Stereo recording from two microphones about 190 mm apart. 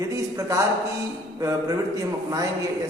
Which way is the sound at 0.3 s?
15° right (ahead or behind).